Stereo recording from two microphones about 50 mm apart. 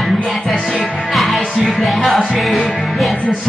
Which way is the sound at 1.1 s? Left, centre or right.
Centre.